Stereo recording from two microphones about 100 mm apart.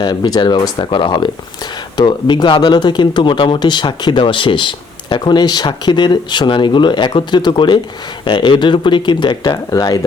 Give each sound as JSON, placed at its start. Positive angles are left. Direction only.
{"t": 0.0, "sound": "speech", "side_deg": 45}